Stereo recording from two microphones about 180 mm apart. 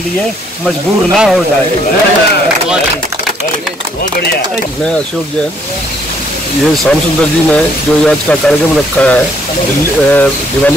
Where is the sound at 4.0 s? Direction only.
60° left (ahead or behind).